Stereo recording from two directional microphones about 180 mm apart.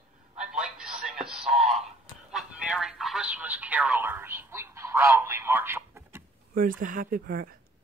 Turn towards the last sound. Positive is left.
turn(degrees=-50)  # may be behind; listen again after turning